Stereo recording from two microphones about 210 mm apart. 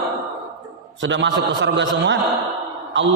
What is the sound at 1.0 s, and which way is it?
A man's voice, 60° right (ahead or behind).